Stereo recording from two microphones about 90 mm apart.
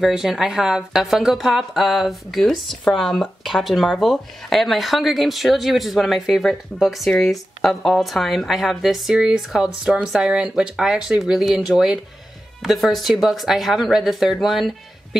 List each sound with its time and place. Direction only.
0.0 s speech: 5° right (ahead or behind)